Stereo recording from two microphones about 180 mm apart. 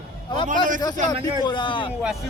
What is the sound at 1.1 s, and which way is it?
Speech, 25° left (ahead or behind).